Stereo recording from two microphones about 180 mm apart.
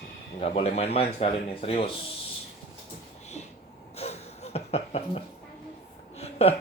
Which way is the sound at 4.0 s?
35° left (ahead or behind).